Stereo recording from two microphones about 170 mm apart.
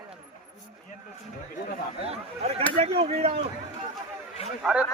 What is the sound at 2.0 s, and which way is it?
Speech, 35° right (ahead or behind).